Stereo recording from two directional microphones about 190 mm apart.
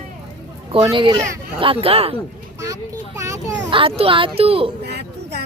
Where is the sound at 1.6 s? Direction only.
30° right (ahead or behind).